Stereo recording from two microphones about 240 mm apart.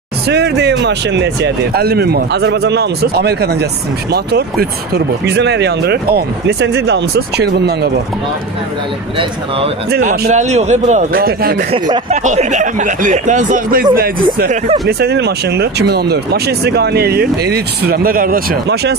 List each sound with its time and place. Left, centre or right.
0.3 s speech: right
10.0 s speech: right
11.7 s speech: right